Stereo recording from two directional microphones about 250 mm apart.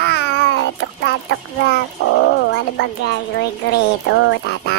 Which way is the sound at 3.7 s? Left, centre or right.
Left.